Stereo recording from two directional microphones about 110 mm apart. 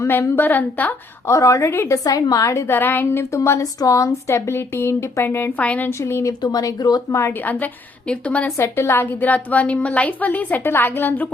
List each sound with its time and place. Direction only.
0.0 s a woman's voice: 20° left (ahead or behind)
1.3 s a woman's voice: 30° left (ahead or behind); by 8.5 s 15° left (ahead or behind)
8.5 s a woman's voice: 25° left (ahead or behind)